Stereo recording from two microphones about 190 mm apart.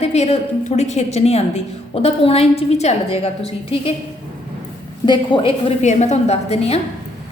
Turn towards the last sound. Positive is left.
turn(degrees=35)  # may be behind; listen again after turning